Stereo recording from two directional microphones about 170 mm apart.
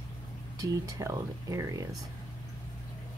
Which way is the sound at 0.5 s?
20° right (ahead or behind).